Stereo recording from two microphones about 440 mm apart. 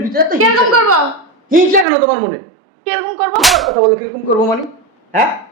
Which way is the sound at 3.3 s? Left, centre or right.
Centre.